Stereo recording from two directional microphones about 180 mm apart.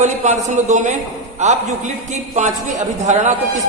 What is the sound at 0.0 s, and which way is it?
A man's voice, 40° right (ahead or behind).